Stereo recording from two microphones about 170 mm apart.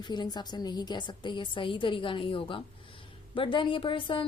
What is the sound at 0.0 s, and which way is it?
A woman's voice, 25° left (ahead or behind).